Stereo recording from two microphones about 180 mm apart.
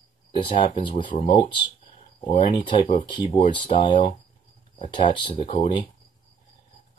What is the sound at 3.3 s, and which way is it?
Speech, 30° left (ahead or behind).